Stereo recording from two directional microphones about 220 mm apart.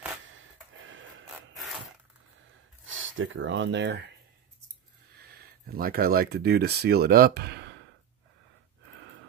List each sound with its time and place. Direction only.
0.3 s a sound: 60° right (ahead or behind)
2.9 s speech: 60° right (ahead or behind)
5.2 s speech: 45° right (ahead or behind)